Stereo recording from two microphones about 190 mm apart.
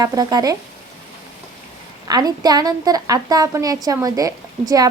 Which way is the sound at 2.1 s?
20° right (ahead or behind).